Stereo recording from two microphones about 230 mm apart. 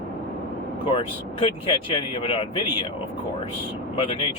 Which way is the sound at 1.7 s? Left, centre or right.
Left.